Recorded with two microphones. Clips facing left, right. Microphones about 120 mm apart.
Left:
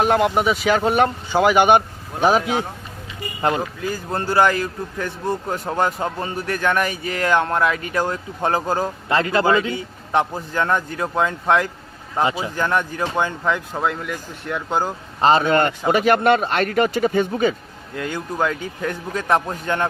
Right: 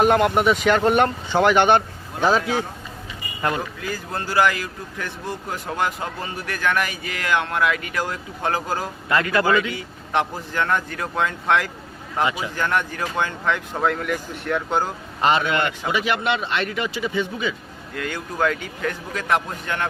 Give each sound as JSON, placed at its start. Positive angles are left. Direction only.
{"t": 0.0, "sound": "a man's voice", "side_deg": 0}
{"t": 10.2, "sound": "a man's voice", "side_deg": 20}
{"t": 12.5, "sound": "speech", "side_deg": 20}
{"t": 15.2, "sound": "a man's voice", "side_deg": 35}
{"t": 17.9, "sound": "speech", "side_deg": 20}